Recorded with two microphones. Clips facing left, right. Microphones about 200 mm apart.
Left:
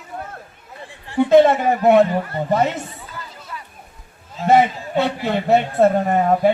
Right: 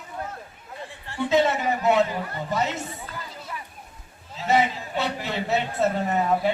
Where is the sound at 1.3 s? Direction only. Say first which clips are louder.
Left 8 dB; 55° left (ahead or behind).